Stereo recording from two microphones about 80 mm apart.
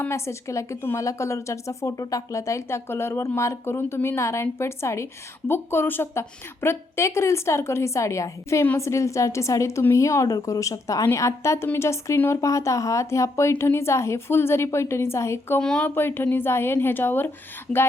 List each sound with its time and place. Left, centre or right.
0.1 s a woman's voice: left
15.6 s speech: centre
16.0 s a woman's voice: left